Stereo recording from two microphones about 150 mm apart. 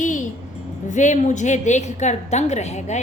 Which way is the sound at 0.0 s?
55° left (ahead or behind).